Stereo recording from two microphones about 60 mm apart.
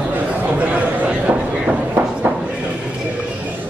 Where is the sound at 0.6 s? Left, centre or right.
Right.